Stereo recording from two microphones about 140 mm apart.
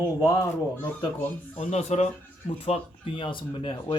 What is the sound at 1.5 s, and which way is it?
Speech, 50° left (ahead or behind).